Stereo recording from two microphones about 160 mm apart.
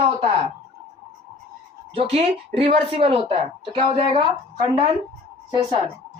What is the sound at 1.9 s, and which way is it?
Speech, 35° right (ahead or behind).